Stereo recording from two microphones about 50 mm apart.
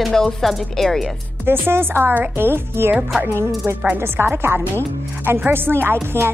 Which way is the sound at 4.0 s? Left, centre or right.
Right.